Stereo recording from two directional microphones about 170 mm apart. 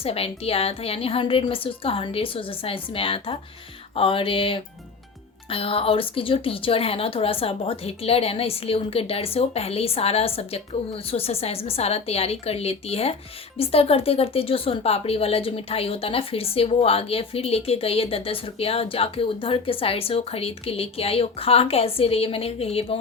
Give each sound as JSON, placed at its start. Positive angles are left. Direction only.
{"t": 0.0, "sound": "speech", "side_deg": 35}